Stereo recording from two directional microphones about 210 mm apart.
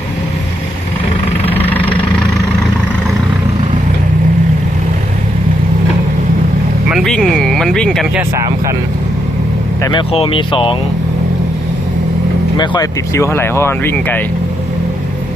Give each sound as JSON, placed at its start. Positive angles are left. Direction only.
{"t": 1.5, "sound": "vehicle", "side_deg": 10}
{"t": 6.9, "sound": "speech", "side_deg": 0}
{"t": 8.4, "sound": "speech", "side_deg": -15}
{"t": 9.8, "sound": "speech", "side_deg": 25}
{"t": 12.5, "sound": "speech", "side_deg": 20}